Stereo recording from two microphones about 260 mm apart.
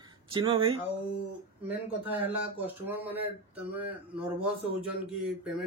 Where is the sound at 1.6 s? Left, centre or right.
Centre.